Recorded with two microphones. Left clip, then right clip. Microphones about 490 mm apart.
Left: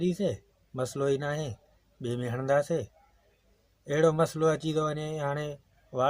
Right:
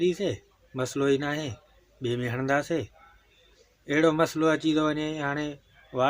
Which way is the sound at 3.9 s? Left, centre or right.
Left.